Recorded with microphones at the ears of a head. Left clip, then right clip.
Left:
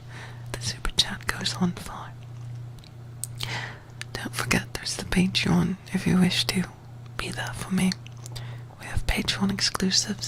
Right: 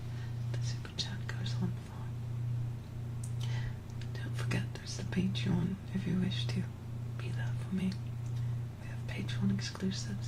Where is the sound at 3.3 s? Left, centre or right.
Left.